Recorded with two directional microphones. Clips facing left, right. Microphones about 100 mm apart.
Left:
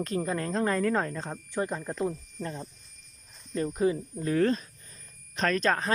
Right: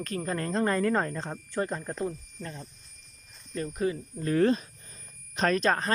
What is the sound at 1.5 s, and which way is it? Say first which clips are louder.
Speech: even; 10° left (ahead or behind).